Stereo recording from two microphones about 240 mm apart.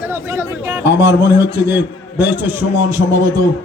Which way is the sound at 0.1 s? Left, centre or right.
Centre.